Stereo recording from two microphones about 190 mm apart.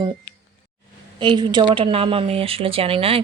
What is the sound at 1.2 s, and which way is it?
A woman's voice, 25° right (ahead or behind).